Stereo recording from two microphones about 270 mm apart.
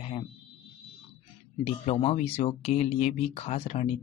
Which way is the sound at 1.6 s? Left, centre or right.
Left.